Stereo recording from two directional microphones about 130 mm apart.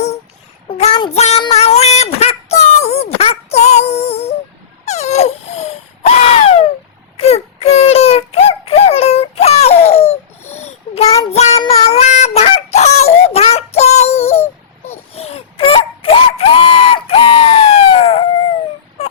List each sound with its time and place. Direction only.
1.1 s child singing: 60° left (ahead or behind)
1.4 s a sound: 50° left (ahead or behind)
4.9 s wail: 55° left (ahead or behind)
7.2 s a sound: 50° left (ahead or behind)
10.5 s child singing: 55° left (ahead or behind)
11.9 s honk: 60° left (ahead or behind)
14.8 s wail: 55° left (ahead or behind)